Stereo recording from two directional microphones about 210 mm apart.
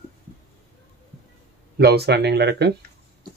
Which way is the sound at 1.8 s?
50° right (ahead or behind).